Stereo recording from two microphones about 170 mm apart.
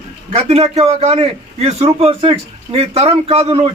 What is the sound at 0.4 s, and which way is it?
A man's voice, 40° right (ahead or behind).